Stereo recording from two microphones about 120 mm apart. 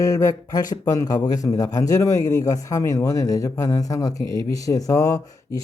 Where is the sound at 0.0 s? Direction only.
30° left (ahead or behind).